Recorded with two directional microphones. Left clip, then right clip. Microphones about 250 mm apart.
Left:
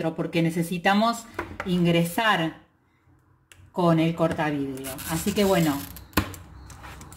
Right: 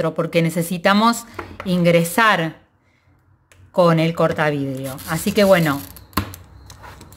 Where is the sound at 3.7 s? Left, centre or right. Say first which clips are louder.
Right 7 dB; right.